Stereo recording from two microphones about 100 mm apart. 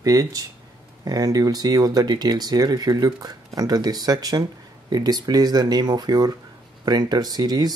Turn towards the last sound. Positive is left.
turn(degrees=-40)  # may be behind; listen again after turning